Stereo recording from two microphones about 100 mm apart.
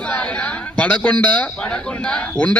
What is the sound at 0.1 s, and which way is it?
A man's voice, 10° left (ahead or behind).